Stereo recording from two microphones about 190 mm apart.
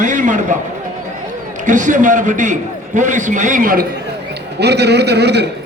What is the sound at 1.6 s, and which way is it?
A man's voice, 40° right (ahead or behind).